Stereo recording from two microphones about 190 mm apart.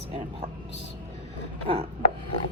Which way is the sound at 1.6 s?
30° right (ahead or behind).